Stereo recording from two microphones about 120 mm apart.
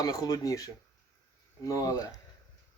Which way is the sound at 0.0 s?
30° left (ahead or behind).